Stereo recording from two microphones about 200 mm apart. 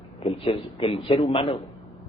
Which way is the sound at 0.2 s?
30° left (ahead or behind).